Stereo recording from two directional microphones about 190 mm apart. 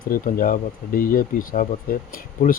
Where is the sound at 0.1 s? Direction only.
50° left (ahead or behind).